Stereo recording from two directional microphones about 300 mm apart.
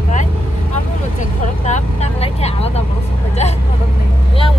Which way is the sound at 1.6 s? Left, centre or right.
Left.